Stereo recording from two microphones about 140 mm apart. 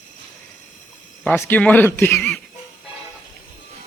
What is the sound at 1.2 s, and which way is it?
A man's voice, 15° left (ahead or behind).